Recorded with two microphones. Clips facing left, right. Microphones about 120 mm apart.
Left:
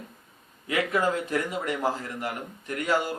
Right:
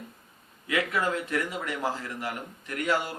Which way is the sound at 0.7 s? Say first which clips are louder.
Left 2 dB; 30° left (ahead or behind).